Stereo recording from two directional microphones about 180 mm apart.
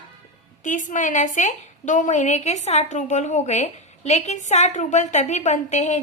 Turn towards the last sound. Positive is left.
turn(degrees=40)  # may be behind; listen again after turning